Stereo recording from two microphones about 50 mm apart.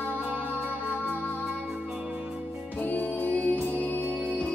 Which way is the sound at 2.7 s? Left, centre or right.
Left.